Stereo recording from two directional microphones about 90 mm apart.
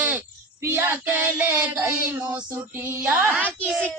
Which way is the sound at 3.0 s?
15° right (ahead or behind).